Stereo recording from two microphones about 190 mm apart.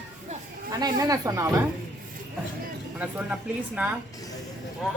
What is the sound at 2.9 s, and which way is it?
Speech, 5° right (ahead or behind).